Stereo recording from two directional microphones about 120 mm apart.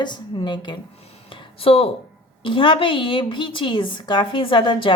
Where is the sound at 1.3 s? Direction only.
50° left (ahead or behind).